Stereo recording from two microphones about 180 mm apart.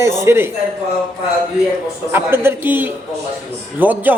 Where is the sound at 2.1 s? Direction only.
10° right (ahead or behind).